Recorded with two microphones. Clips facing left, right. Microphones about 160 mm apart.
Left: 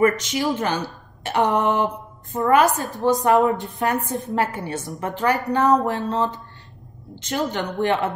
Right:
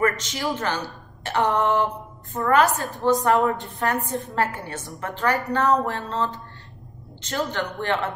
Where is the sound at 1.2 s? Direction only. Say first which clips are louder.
Left 2 dB; 15° left (ahead or behind).